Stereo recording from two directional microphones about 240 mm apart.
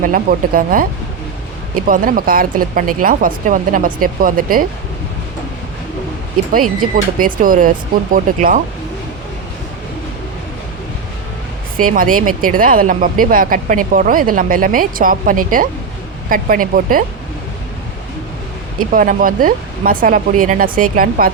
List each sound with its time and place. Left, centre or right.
0.0 s speech: right
6.9 s speech: right
11.9 s speech: right
18.8 s speech: right